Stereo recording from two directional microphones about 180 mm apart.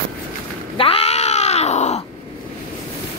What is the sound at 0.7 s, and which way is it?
Cat, 30° left (ahead or behind).